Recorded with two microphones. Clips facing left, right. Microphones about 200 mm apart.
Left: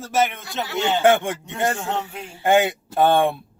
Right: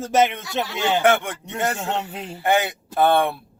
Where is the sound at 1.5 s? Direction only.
20° right (ahead or behind).